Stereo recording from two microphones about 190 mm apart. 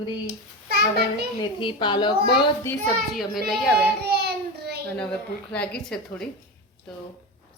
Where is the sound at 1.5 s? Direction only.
25° left (ahead or behind).